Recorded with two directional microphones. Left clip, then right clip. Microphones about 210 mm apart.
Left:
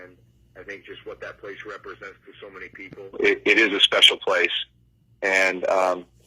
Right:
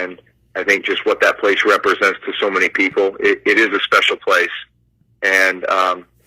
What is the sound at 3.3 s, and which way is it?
Speech, 10° left (ahead or behind).